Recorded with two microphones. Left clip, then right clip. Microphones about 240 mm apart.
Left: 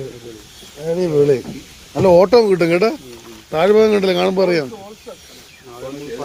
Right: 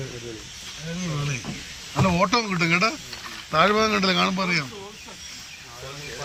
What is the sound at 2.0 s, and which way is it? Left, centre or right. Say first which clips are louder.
Speech: left 12 dB; centre.